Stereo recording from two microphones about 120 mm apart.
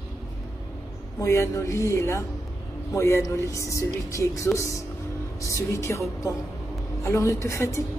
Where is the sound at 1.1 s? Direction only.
25° left (ahead or behind).